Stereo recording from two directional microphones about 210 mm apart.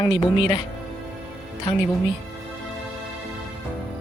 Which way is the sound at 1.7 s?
20° left (ahead or behind).